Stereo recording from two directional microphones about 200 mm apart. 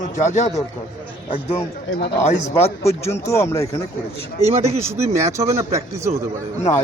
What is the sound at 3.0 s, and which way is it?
Speech, 15° left (ahead or behind).